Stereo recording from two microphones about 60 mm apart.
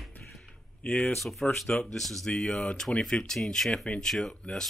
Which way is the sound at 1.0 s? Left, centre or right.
Centre.